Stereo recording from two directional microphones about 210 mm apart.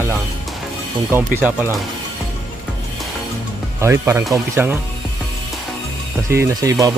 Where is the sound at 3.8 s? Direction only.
10° right (ahead or behind).